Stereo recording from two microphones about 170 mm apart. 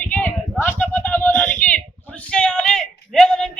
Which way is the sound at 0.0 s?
10° left (ahead or behind).